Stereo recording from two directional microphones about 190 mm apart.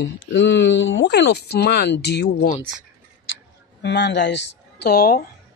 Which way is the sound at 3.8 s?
65° left (ahead or behind).